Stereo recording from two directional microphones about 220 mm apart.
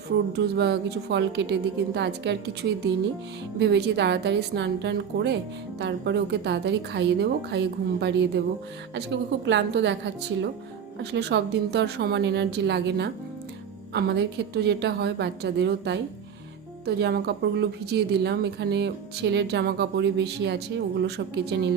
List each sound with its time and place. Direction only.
0.3 s speech: 50° right (ahead or behind)
9.5 s speech: 55° right (ahead or behind)